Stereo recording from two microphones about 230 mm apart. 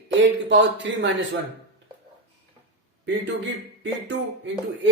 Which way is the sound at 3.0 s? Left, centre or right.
Right.